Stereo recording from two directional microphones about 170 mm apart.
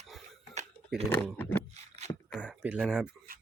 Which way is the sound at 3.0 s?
55° right (ahead or behind).